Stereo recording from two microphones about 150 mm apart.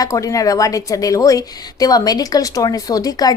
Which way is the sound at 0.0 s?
20° left (ahead or behind).